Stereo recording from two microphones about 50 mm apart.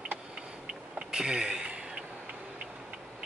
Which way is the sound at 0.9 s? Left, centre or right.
Centre.